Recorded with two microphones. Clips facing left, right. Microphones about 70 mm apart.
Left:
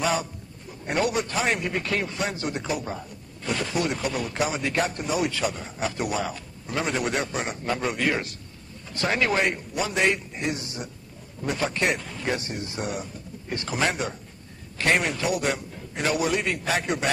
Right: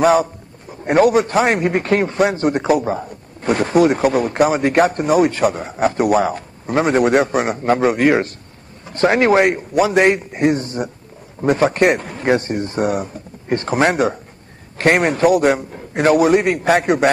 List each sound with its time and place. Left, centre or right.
0.8 s speech: right
3.3 s speech: right
8.8 s speech: right
9.4 s a man's voice: right